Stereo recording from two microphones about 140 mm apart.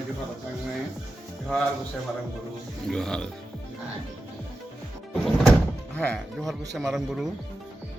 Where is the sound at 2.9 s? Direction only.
5° left (ahead or behind).